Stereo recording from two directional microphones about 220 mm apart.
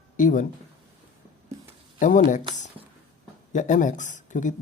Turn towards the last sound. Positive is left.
turn(degrees=35)  # may be behind; listen again after turning